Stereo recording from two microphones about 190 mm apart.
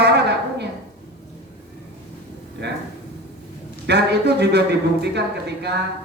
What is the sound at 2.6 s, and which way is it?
Speech, 65° right (ahead or behind).